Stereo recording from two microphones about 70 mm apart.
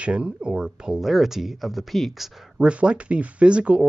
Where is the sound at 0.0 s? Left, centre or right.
Centre.